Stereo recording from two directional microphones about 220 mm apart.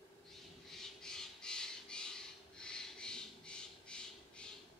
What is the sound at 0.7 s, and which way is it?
Squawk, centre (ahead or behind).